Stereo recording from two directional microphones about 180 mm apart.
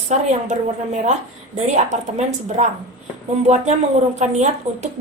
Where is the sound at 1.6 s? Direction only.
40° right (ahead or behind).